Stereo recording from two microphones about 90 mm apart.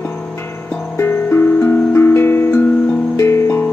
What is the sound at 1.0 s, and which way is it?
Music, 25° left (ahead or behind).